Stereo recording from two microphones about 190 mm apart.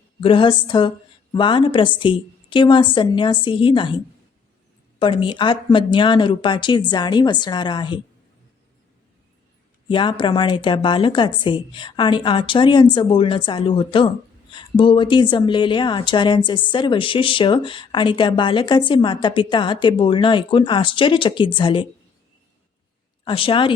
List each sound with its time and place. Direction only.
0.2 s speech: 25° left (ahead or behind)
4.9 s speech: 25° left (ahead or behind)
9.9 s speech: 25° left (ahead or behind)
23.2 s speech: 25° left (ahead or behind)